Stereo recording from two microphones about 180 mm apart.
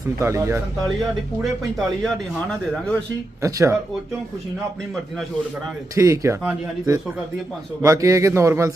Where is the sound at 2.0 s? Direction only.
5° left (ahead or behind).